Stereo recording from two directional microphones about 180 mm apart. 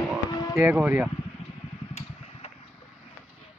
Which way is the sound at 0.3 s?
20° left (ahead or behind).